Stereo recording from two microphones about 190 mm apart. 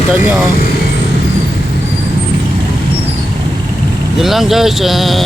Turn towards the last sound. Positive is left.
turn(degrees=0)  # may be behind; listen again after turning